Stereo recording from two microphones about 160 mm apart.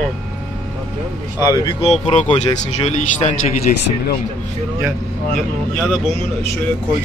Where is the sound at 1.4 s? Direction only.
20° left (ahead or behind).